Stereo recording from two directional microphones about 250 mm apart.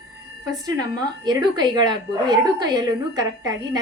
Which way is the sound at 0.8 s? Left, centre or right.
Centre.